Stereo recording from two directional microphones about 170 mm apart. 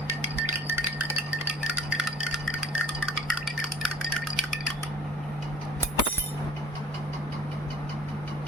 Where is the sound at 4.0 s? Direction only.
Centre (ahead or behind).